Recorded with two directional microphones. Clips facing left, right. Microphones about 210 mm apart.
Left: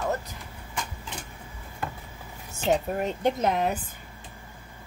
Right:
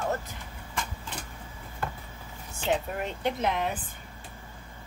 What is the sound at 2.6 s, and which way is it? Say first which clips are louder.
A woman's voice: left 4 dB; 40° left (ahead or behind).